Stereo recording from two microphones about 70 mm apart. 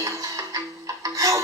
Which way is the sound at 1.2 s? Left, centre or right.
Right.